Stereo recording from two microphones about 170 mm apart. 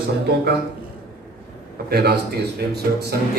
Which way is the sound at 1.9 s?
70° right (ahead or behind).